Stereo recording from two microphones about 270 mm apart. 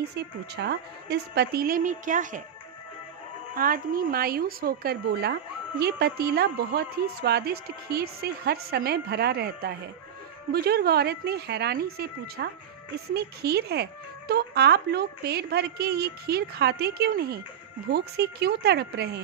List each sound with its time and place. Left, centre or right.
0.0 s speech: right
3.5 s speech: right